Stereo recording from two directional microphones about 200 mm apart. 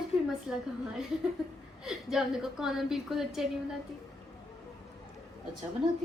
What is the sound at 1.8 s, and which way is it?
A woman's voice, centre (ahead or behind).